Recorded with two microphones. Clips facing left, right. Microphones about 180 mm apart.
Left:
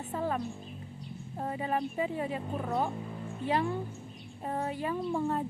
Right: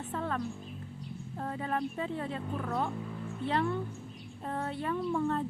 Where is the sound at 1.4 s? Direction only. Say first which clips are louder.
Left 2 dB; 10° left (ahead or behind).